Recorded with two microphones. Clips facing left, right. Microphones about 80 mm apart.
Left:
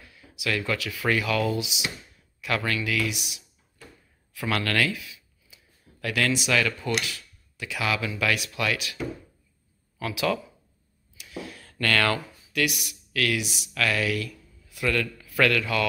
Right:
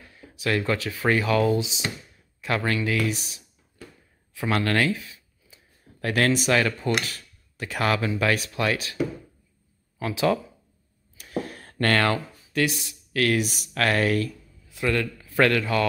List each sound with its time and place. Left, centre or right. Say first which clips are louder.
0.0 s speech: right 3 dB; right
4.3 s speech: right 3 dB; right
9.9 s speech: right 3 dB; right
11.1 s a sound: right 7 dB; right
11.9 s speech: right 1 dB; right
14.3 s speech: right 2 dB; right